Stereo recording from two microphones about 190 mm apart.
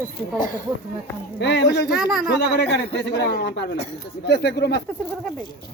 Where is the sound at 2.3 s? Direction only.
65° left (ahead or behind).